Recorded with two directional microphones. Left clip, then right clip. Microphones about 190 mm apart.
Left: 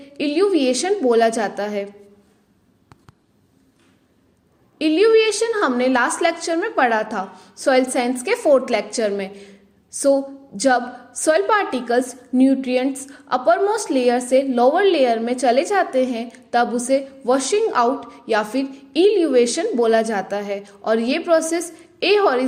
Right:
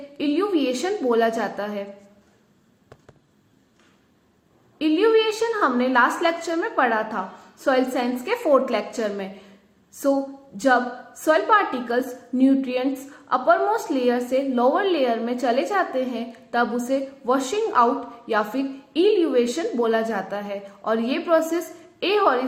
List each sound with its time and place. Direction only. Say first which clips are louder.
0.2 s a woman's voice: left 5 dB; 35° left (ahead or behind)
4.8 s a woman's voice: left 4 dB; 35° left (ahead or behind)
10.6 s a woman's voice: left 2 dB; 35° left (ahead or behind)